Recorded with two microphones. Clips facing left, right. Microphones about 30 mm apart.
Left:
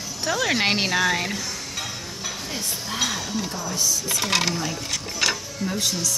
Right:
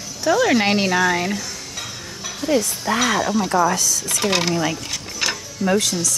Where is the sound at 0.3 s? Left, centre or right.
Centre.